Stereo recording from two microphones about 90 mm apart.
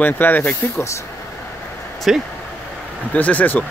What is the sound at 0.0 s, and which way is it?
Speech, 20° left (ahead or behind).